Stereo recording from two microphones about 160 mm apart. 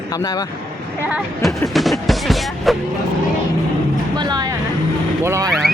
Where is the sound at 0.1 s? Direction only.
25° left (ahead or behind).